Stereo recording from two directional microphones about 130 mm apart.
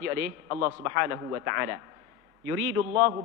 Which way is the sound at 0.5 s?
20° right (ahead or behind).